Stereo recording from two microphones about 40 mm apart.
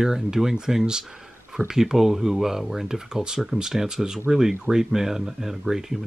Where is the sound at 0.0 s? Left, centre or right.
Centre.